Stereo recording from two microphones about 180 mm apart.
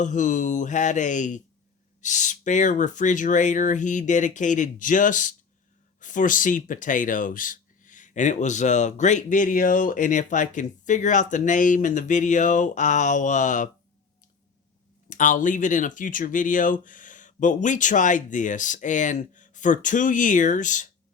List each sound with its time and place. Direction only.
0.0 s speech: 45° left (ahead or behind)
15.1 s speech: 45° left (ahead or behind)